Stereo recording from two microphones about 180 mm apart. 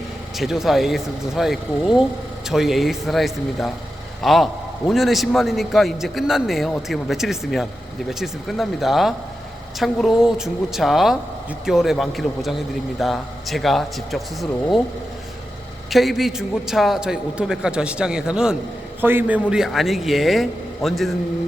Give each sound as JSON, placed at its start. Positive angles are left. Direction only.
{"t": 0.3, "sound": "a man's voice", "side_deg": 0}
{"t": 15.9, "sound": "a man's voice", "side_deg": 0}